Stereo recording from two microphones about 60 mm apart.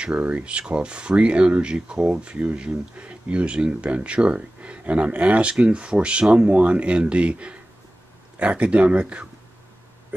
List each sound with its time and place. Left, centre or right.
0.0 s speech: right